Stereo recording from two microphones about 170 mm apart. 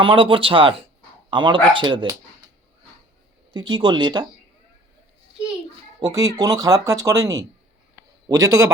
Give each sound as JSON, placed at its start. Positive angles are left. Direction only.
{"t": 0.0, "sound": "speech", "side_deg": -30}
{"t": 3.5, "sound": "speech", "side_deg": -25}
{"t": 6.0, "sound": "speech", "side_deg": -20}